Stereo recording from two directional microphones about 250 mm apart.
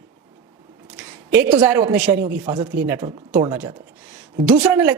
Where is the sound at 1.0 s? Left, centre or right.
Centre.